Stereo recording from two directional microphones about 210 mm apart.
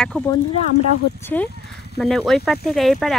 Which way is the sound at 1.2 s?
10° left (ahead or behind).